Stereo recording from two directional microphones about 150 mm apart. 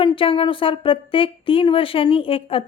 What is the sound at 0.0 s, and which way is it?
Speech, 35° left (ahead or behind).